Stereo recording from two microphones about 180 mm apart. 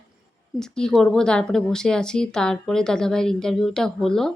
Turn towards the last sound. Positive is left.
turn(degrees=0)  # may be behind; listen again after turning